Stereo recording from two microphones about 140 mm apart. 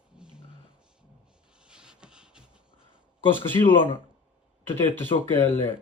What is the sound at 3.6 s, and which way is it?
Speech, 40° left (ahead or behind).